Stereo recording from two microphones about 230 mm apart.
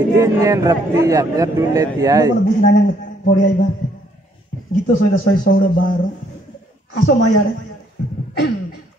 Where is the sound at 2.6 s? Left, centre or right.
Left.